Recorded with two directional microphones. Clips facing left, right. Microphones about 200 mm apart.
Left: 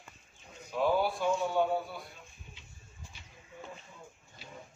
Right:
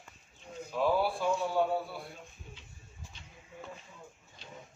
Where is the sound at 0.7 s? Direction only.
Centre (ahead or behind).